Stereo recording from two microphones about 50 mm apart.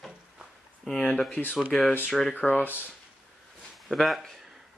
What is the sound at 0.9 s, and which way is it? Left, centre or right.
Speech, left.